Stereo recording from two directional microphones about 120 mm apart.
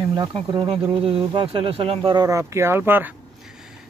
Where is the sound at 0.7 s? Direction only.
50° right (ahead or behind).